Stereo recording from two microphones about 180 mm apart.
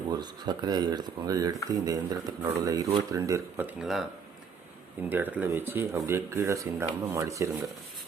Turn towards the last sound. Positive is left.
turn(degrees=-15)  # may be behind; listen again after turning